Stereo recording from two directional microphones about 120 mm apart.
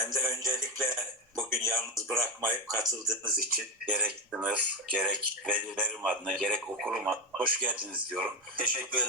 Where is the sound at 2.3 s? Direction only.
30° right (ahead or behind).